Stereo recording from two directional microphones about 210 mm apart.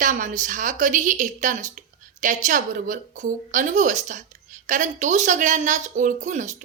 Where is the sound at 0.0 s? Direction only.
40° right (ahead or behind).